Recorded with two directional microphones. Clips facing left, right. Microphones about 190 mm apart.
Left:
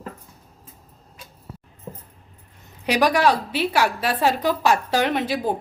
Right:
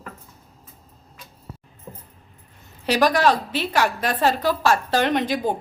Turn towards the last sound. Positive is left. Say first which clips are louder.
# right 1 dB
turn(degrees=5)  # may be behind; listen again after turning